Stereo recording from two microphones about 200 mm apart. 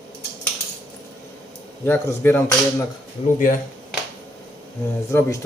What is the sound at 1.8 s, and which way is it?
Speech, 10° left (ahead or behind).